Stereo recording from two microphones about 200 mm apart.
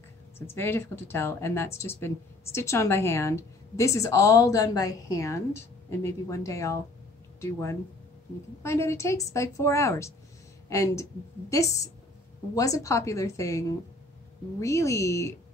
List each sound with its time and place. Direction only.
0.6 s speech: 10° left (ahead or behind)
8.6 s speech: 15° left (ahead or behind)